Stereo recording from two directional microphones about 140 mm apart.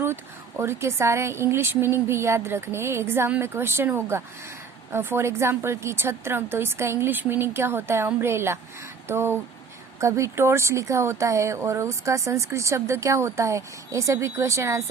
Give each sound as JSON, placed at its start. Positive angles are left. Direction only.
{"t": 0.0, "sound": "speech", "side_deg": -15}